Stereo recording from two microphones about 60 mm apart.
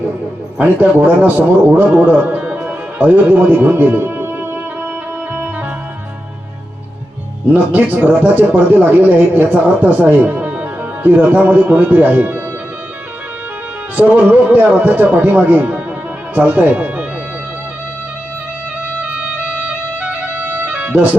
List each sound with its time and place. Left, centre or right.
0.6 s a man's voice: right
7.5 s speech: right
13.9 s speech: right
20.0 s music: right